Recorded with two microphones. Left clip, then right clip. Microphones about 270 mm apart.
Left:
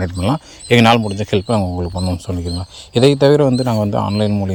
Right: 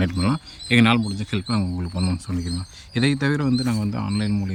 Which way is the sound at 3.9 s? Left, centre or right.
Left.